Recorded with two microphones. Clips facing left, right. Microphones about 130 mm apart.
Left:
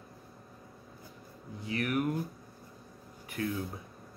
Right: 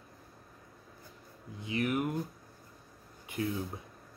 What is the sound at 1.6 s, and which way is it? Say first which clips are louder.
Speech: even; 20° right (ahead or behind).